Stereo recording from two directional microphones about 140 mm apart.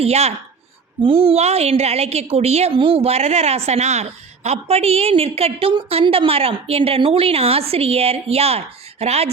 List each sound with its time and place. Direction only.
0.0 s a woman's voice: 50° right (ahead or behind)